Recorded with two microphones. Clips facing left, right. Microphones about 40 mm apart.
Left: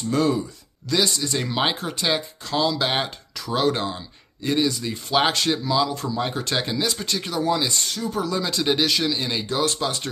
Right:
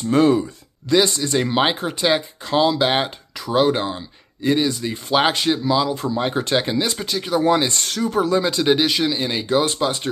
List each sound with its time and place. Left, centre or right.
0.1 s speech: right
2.8 s speech: centre
6.0 s speech: right
7.1 s speech: centre
7.4 s speech: right
8.1 s speech: right